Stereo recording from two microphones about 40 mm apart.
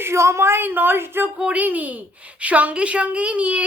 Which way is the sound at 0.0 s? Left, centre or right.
Right.